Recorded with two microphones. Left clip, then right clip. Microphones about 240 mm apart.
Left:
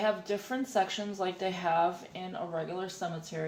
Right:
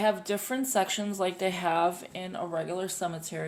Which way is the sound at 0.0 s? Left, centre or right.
Right.